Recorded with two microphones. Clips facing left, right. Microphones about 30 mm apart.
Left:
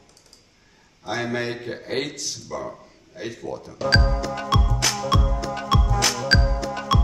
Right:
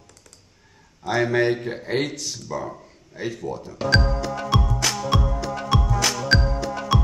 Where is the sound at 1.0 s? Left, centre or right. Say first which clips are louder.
Right 6 dB; centre.